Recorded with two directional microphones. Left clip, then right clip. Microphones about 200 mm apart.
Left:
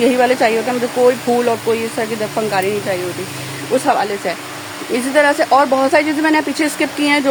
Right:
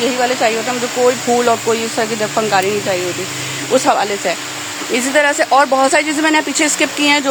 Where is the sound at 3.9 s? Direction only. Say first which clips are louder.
Right 2 dB; 5° right (ahead or behind).